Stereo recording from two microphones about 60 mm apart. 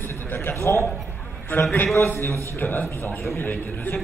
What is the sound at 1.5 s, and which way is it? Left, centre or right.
Speech, left.